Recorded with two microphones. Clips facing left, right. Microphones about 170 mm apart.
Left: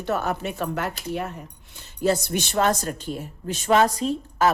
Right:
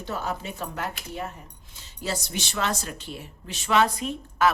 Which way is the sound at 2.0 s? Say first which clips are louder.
Left 9 dB; 55° left (ahead or behind).